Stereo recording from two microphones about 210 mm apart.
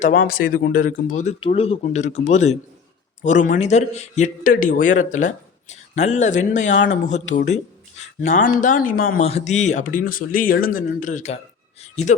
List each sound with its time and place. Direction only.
0.3 s a man's voice: 45° left (ahead or behind)